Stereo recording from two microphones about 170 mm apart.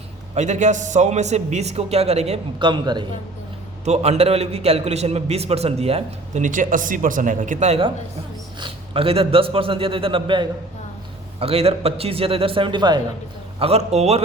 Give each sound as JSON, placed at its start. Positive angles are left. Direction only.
{"t": 0.3, "sound": "a man's voice", "side_deg": -45}
{"t": 3.8, "sound": "a man's voice", "side_deg": -40}
{"t": 13.6, "sound": "a man's voice", "side_deg": -35}